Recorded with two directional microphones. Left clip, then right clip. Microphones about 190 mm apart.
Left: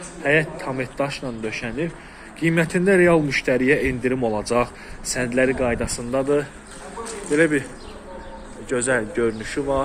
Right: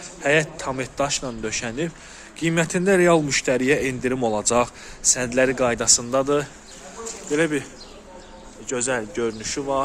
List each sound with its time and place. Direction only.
0.2 s a man's voice: 35° right (ahead or behind)
2.4 s speech: 30° right (ahead or behind)
7.3 s speech: 25° right (ahead or behind)
8.7 s speech: 20° right (ahead or behind)